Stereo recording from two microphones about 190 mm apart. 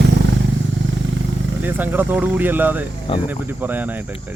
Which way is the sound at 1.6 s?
10° right (ahead or behind).